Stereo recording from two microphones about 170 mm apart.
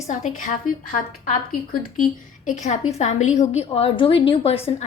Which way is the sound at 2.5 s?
40° left (ahead or behind).